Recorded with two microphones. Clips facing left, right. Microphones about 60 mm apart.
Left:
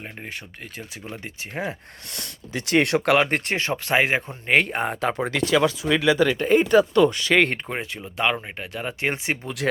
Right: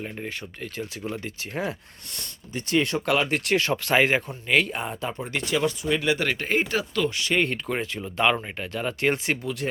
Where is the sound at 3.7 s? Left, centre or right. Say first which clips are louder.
Left 2 dB; centre.